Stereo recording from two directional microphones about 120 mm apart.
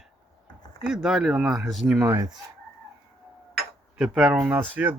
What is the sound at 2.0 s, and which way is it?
Speech, 20° right (ahead or behind).